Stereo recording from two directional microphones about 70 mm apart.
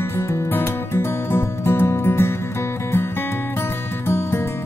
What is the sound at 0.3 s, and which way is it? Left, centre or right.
Music, left.